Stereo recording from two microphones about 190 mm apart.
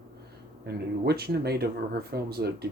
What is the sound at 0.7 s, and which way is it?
Speech, 55° right (ahead or behind).